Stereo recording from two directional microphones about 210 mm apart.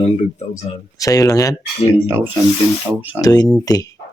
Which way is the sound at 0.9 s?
15° left (ahead or behind).